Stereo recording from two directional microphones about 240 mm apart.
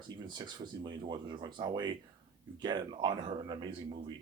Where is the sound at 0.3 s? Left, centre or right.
Centre.